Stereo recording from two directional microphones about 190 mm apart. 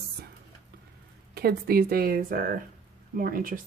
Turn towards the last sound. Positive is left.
turn(degrees=-45)  # may be behind; listen again after turning